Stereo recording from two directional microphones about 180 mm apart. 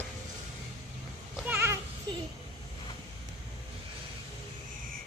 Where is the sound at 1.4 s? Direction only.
15° right (ahead or behind).